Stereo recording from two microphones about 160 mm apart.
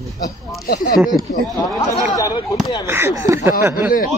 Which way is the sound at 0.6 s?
80° left.